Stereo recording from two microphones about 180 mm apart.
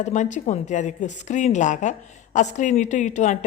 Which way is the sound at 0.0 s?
40° left (ahead or behind).